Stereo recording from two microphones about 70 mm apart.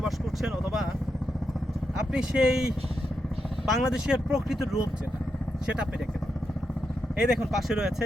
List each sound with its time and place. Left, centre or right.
0.0 s vehicle: centre
2.1 s speech: centre
7.2 s speech: centre